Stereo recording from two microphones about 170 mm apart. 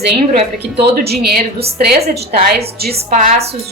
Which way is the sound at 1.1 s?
70° right (ahead or behind).